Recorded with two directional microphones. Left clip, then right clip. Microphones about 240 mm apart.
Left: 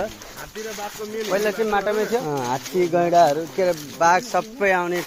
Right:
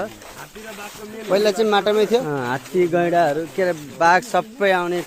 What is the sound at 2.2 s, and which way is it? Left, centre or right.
Speech, right.